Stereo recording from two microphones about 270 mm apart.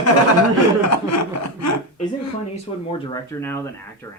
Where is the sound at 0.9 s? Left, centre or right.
Left.